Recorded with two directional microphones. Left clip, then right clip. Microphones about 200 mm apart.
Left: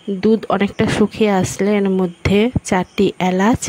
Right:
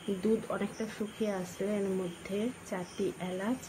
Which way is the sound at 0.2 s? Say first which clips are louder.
Left 18 dB; 50° left (ahead or behind).